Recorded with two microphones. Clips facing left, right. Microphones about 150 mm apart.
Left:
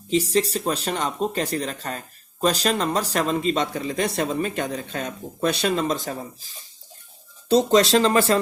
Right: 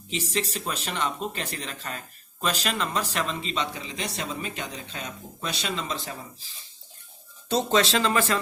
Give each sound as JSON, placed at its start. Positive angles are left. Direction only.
{"t": 0.1, "sound": "speech", "side_deg": 35}
{"t": 7.4, "sound": "speech", "side_deg": 40}